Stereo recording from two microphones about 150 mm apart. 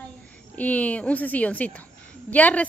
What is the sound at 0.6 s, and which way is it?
A woman's voice, 10° left (ahead or behind).